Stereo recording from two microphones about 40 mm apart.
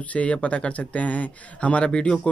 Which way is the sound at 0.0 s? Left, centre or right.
Left.